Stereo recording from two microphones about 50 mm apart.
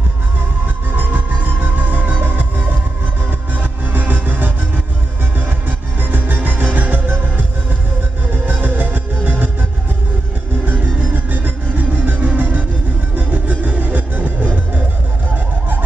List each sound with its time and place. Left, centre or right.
0.9 s music: right
5.7 s music: right
8.5 s music: right
10.6 s music: right